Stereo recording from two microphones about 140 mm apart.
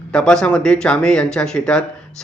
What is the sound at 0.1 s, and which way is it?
Speech, 5° left (ahead or behind).